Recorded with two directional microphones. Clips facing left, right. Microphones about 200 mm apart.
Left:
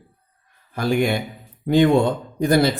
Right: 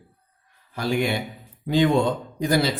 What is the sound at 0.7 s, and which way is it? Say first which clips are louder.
A man's voice: left 4 dB; 50° left (ahead or behind).